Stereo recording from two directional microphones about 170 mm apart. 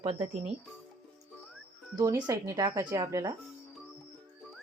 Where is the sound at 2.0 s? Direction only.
20° right (ahead or behind).